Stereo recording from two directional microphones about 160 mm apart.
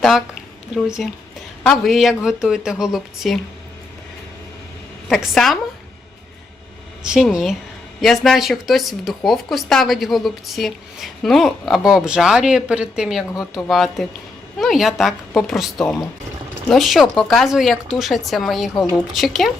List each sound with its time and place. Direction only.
0.7 s speech: 5° right (ahead or behind)
5.0 s speech: centre (ahead or behind)
7.0 s speech: 5° right (ahead or behind)
18.7 s speech: 20° left (ahead or behind)
19.1 s speech: centre (ahead or behind)